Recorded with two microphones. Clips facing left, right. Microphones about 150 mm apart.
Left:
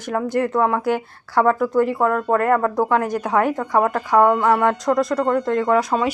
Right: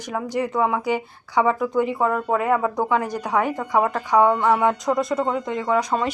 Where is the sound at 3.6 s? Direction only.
10° right (ahead or behind).